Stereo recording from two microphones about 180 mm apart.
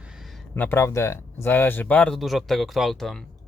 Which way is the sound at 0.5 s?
10° left (ahead or behind).